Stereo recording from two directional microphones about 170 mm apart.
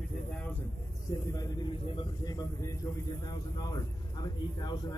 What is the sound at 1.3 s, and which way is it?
A man's voice, 25° left (ahead or behind).